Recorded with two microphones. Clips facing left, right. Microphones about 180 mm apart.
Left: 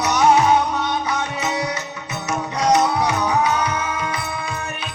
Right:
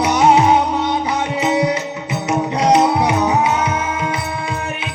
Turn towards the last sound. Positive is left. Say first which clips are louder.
# right 3 dB
turn(degrees=-25)  # may be behind; listen again after turning